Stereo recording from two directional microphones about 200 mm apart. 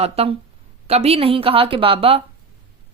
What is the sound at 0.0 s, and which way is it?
A woman's voice, 30° right (ahead or behind).